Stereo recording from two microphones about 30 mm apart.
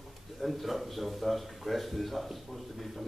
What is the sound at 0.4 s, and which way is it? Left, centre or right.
A man's voice, centre.